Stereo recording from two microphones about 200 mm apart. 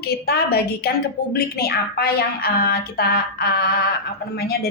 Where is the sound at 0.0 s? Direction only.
50° left (ahead or behind).